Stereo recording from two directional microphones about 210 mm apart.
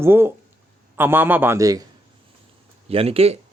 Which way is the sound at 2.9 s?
30° right (ahead or behind).